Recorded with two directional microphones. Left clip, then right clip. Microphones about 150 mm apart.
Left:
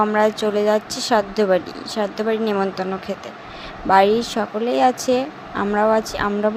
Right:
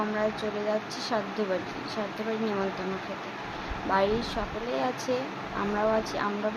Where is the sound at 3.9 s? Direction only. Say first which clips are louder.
Left 12 dB; 50° left (ahead or behind).